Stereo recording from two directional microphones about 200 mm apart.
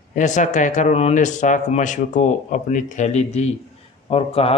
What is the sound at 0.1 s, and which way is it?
A man's voice, 40° left (ahead or behind).